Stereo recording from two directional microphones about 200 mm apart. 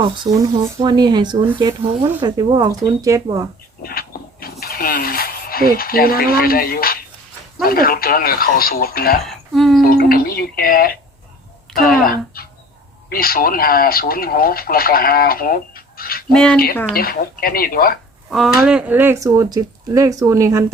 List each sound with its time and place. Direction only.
0.0 s speech: 20° right (ahead or behind)
3.8 s a sound: 50° left (ahead or behind)
5.7 s speech: 50° left (ahead or behind)
9.2 s a woman's voice: centre (ahead or behind)
9.8 s speech: 50° left (ahead or behind)
12.4 s a sound: 50° left (ahead or behind)
13.1 s speech: 50° left (ahead or behind)
16.3 s speech: 5° left (ahead or behind)
16.9 s speech: 50° left (ahead or behind)
18.3 s speech: centre (ahead or behind)